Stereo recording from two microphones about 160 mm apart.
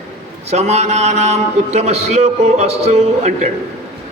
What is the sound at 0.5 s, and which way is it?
A man's voice, 45° right (ahead or behind).